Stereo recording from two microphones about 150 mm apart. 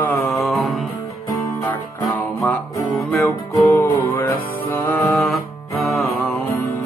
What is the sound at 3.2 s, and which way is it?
Music, 15° left (ahead or behind).